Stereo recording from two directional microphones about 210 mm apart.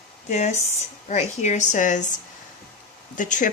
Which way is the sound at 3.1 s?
35° left (ahead or behind).